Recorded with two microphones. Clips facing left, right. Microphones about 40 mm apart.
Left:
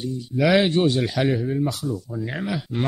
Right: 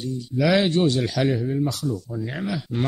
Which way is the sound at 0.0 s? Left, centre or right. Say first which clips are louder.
Left 1 dB; centre.